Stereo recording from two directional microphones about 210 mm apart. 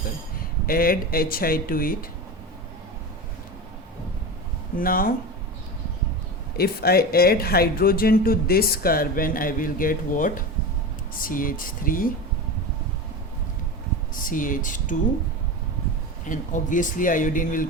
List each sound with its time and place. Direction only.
0.7 s speech: 45° left (ahead or behind)
4.8 s speech: 45° left (ahead or behind)
6.6 s speech: 45° left (ahead or behind)
14.3 s speech: 40° left (ahead or behind)
16.2 s speech: 35° left (ahead or behind)